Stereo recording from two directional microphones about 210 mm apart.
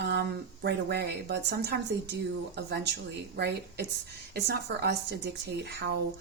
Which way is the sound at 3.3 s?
50° right (ahead or behind).